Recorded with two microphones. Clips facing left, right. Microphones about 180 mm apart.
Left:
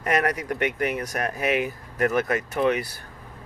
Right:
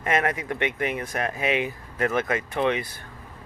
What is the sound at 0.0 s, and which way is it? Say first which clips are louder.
Speech: left 1 dB; 40° left (ahead or behind).